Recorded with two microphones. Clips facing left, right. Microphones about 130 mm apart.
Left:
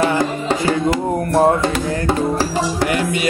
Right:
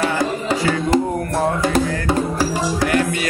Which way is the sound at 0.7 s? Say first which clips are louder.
Even; 35° left (ahead or behind).